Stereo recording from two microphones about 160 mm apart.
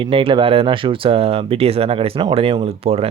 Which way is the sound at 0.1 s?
35° right (ahead or behind).